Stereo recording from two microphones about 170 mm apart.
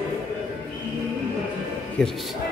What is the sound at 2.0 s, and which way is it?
Speech, 5° left (ahead or behind).